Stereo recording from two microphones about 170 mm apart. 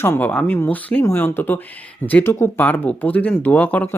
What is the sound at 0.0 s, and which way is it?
Speech, 15° left (ahead or behind).